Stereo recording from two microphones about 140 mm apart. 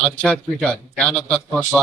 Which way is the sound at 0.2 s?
10° left (ahead or behind).